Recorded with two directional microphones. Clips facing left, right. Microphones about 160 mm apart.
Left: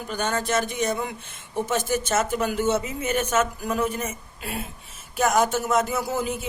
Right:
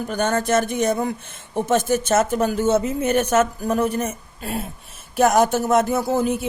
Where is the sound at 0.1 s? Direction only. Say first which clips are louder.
Right 5 dB; 50° right (ahead or behind).